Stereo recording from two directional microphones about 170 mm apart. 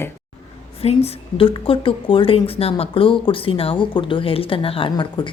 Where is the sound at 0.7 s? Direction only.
35° left (ahead or behind).